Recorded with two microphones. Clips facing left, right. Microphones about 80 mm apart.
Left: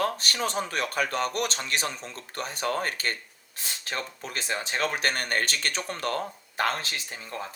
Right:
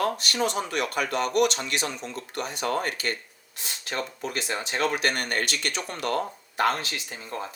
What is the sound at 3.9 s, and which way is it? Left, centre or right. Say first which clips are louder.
Speech: right 4 dB; right.